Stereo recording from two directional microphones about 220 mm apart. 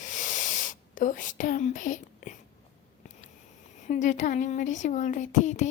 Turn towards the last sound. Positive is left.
turn(degrees=35)  # may be behind; listen again after turning